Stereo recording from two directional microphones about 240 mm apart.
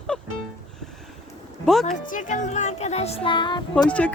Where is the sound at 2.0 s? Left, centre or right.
Left.